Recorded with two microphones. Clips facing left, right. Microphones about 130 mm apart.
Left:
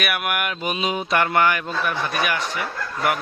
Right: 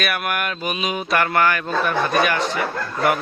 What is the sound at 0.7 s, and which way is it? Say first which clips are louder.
A man's voice: even; 25° left (ahead or behind).